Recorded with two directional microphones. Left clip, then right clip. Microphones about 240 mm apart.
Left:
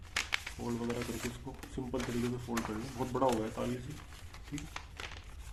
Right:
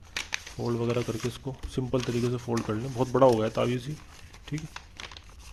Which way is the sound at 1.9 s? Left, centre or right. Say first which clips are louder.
Right 8 dB; right.